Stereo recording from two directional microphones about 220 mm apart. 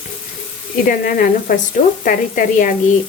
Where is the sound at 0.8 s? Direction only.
40° left (ahead or behind).